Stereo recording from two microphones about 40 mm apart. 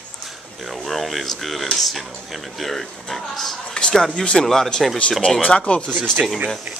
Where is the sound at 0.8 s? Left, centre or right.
Centre.